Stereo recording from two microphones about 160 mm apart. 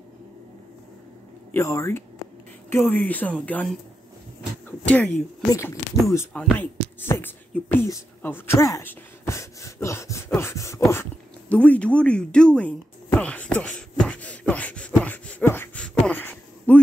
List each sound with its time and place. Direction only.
1.5 s speech: 20° left (ahead or behind)
6.5 s whispering: 15° left (ahead or behind)